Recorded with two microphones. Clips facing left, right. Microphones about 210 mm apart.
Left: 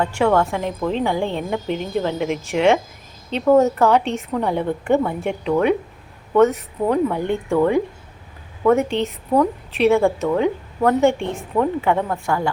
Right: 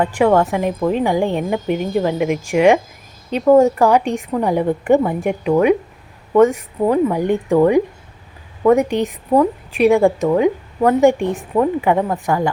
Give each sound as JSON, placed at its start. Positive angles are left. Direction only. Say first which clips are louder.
{"t": 0.0, "sound": "a woman's voice", "louder": "right 3 dB", "side_deg": -15}